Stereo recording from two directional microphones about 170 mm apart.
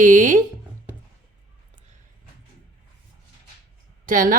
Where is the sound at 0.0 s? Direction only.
50° right (ahead or behind).